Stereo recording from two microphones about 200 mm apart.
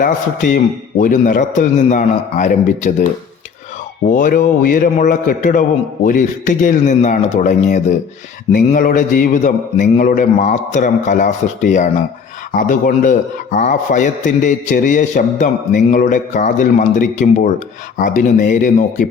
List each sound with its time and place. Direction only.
0.0 s a man's voice: 45° left (ahead or behind)
4.1 s a man's voice: 40° left (ahead or behind)